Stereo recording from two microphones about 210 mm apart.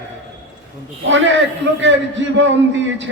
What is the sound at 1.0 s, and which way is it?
Speech, 60° right (ahead or behind).